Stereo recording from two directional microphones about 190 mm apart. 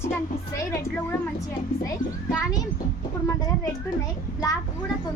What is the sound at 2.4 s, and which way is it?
Speech, 20° left (ahead or behind).